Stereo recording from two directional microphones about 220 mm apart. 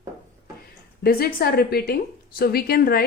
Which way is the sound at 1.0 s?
40° left (ahead or behind).